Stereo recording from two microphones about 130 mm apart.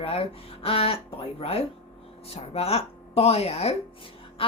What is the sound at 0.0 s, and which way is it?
A woman's voice, 50° left (ahead or behind).